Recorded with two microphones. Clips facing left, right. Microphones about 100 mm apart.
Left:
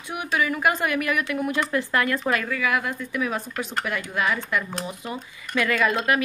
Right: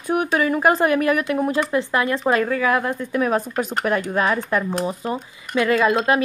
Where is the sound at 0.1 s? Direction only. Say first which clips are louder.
Right 6 dB; 40° right (ahead or behind).